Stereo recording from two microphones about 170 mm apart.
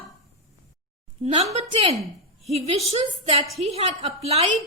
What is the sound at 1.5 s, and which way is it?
A woman's voice, 40° right (ahead or behind).